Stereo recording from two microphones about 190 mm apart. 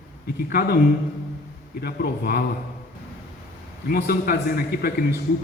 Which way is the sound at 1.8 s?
55° left (ahead or behind).